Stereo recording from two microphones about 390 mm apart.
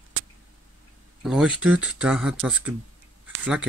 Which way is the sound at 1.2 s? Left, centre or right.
Centre.